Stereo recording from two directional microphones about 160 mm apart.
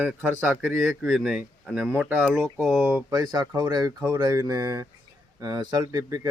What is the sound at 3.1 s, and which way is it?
Speech, 25° right (ahead or behind).